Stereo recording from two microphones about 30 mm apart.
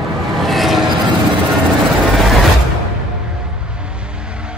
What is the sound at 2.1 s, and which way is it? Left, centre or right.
Music, centre.